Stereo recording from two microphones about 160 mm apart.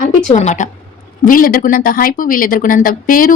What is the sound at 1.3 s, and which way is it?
Speech, 60° left (ahead or behind).